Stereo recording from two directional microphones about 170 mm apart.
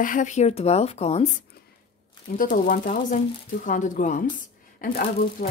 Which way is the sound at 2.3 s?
50° left (ahead or behind).